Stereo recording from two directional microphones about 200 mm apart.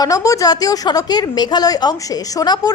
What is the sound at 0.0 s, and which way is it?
A woman's voice, 15° left (ahead or behind).